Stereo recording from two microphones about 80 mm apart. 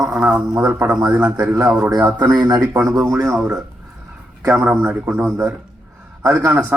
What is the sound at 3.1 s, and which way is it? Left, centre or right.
Speech, centre.